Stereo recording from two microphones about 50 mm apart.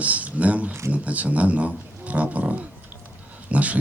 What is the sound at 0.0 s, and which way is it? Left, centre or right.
Speech, right.